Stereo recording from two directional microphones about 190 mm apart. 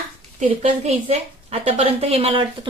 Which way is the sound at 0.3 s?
35° right (ahead or behind).